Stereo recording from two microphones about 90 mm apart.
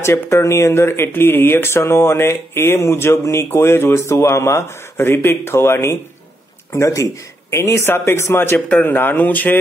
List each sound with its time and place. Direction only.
0.0 s speech: 30° left (ahead or behind)